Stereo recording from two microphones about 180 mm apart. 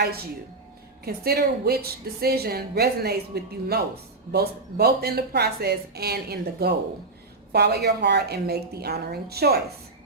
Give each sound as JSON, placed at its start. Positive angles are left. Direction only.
{"t": 1.0, "sound": "a woman's voice", "side_deg": -60}